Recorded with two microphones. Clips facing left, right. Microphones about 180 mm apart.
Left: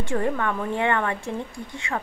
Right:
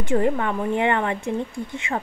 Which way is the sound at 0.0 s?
20° right (ahead or behind).